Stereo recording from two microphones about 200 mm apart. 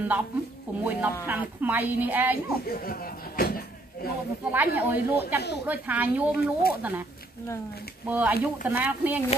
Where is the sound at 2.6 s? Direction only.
50° left (ahead or behind).